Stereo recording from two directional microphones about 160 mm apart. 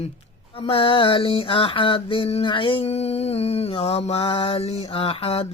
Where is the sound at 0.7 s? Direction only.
35° left (ahead or behind).